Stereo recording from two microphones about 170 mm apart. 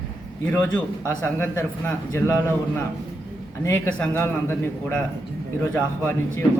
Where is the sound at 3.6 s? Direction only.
15° left (ahead or behind).